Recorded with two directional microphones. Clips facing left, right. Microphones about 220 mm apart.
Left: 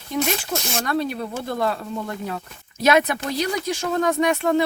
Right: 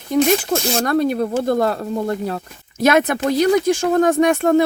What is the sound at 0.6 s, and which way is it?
Speech, 40° right (ahead or behind).